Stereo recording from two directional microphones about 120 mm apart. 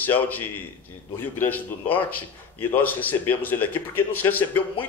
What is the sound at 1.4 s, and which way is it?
Speech, 15° left (ahead or behind).